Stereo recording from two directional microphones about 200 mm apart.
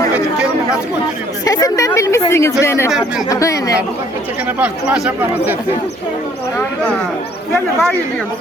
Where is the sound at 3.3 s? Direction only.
15° left (ahead or behind).